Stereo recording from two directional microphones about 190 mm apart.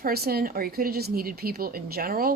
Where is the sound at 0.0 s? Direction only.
55° right (ahead or behind).